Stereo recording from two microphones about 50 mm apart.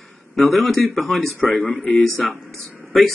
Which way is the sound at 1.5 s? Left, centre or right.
Left.